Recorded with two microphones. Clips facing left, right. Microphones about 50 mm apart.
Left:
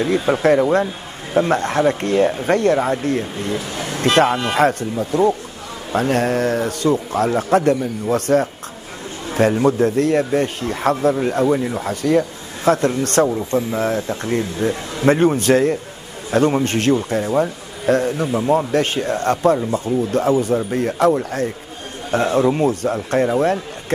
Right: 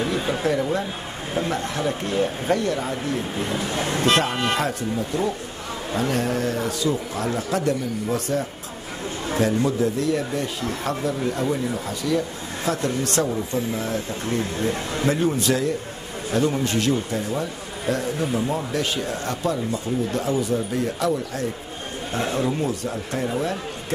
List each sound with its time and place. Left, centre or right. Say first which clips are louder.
0.3 s speech: left 10 dB; left
3.3 s speech: left 2 dB; right
3.6 s speech: right 1 dB; centre
4.6 s speech: left 7 dB; left
18.3 s speech: left 7 dB; left
18.7 s speech: left 7 dB; left